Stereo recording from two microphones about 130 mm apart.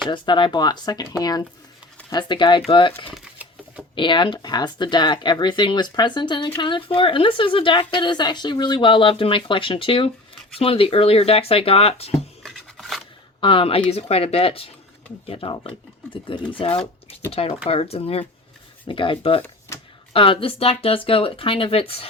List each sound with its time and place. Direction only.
0.1 s a woman's voice: 40° left (ahead or behind)
2.0 s a woman's voice: 35° left (ahead or behind); by 12.1 s 50° left (ahead or behind)
12.4 s a sound: centre (ahead or behind)
13.4 s a woman's voice: 40° left (ahead or behind)
19.4 s typewriter: 20° left (ahead or behind)
20.1 s speech: 40° left (ahead or behind)